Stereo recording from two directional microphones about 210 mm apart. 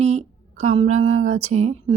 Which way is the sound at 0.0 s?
35° right (ahead or behind).